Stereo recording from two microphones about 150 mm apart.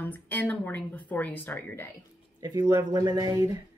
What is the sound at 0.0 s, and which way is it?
Speech, 10° left (ahead or behind).